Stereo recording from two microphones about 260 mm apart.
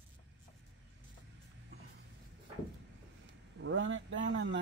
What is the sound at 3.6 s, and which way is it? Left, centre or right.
Speech, right.